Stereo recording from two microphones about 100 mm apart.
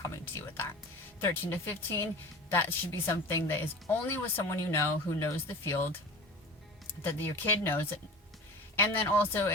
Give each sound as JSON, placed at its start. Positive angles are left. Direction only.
{"t": 0.0, "sound": "music", "side_deg": 30}
{"t": 1.2, "sound": "a woman's voice", "side_deg": 25}
{"t": 7.0, "sound": "a woman's voice", "side_deg": 20}